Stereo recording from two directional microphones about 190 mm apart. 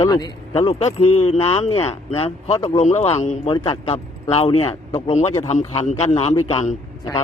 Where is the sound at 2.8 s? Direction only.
35° left (ahead or behind).